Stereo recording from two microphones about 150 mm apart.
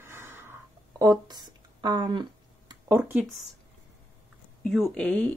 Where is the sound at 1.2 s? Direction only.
30° right (ahead or behind).